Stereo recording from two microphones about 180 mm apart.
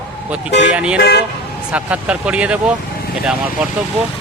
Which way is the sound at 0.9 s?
70° left (ahead or behind).